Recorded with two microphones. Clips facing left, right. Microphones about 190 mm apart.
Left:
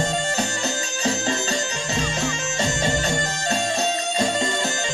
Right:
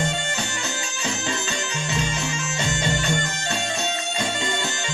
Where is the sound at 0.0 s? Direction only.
40° left (ahead or behind).